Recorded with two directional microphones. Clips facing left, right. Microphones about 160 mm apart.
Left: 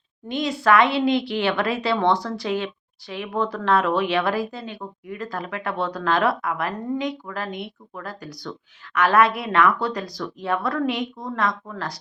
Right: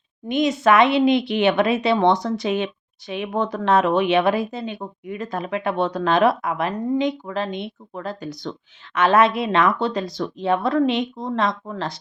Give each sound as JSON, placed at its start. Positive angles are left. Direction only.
{"t": 0.3, "sound": "speech", "side_deg": -20}